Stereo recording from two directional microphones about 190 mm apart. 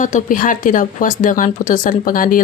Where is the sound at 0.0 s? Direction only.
40° left (ahead or behind).